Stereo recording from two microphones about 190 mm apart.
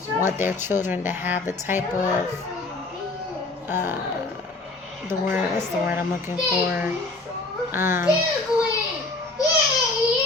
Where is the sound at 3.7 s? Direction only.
10° right (ahead or behind).